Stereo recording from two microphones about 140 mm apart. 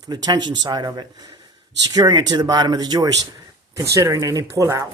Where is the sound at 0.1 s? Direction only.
30° right (ahead or behind).